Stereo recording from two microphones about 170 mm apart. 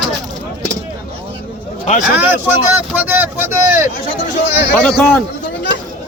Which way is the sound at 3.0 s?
10° right (ahead or behind).